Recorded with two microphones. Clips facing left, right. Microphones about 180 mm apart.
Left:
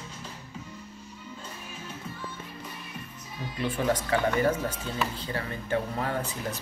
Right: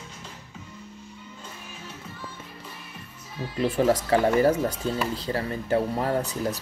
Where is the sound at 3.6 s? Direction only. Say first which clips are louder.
Right 6 dB; 35° right (ahead or behind).